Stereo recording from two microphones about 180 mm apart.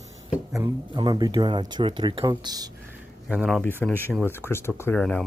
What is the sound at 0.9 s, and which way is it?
Speech, 25° right (ahead or behind).